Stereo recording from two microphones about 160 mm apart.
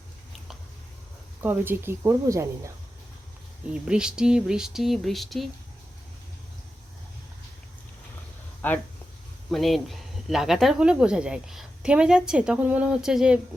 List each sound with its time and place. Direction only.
1.4 s speech: 10° right (ahead or behind)
3.8 s speech: 5° right (ahead or behind)
8.6 s speech: 10° left (ahead or behind)
9.5 s speech: centre (ahead or behind)